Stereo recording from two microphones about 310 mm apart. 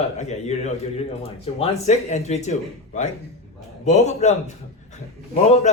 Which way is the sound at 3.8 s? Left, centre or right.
Left.